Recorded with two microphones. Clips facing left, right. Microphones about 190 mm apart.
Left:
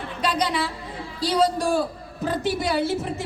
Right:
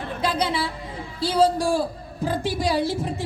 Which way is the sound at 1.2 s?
30° right (ahead or behind).